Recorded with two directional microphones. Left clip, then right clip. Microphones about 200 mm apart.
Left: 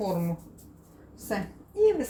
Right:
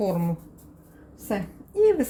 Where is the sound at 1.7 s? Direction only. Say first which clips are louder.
Right 3 dB; 50° right (ahead or behind).